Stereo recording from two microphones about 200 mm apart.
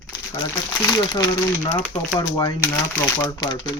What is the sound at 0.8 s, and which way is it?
Speech, 20° left (ahead or behind).